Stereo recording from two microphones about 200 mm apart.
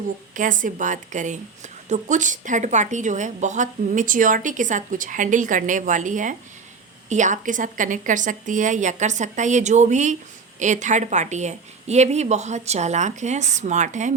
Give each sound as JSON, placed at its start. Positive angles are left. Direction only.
{"t": 0.3, "sound": "a woman's voice", "side_deg": -40}